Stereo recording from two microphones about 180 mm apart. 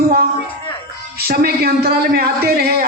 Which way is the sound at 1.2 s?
60° right (ahead or behind).